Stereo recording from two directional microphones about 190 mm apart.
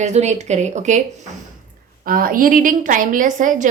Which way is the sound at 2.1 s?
50° right (ahead or behind).